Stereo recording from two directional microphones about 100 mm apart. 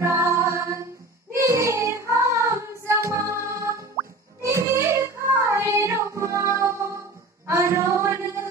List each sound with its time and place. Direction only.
0.0 s music: 30° right (ahead or behind)
4.5 s child singing: 30° right (ahead or behind)
7.4 s a sound: 25° right (ahead or behind)